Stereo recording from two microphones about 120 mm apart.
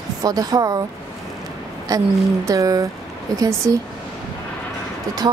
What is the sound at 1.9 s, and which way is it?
A woman's voice, 30° right (ahead or behind).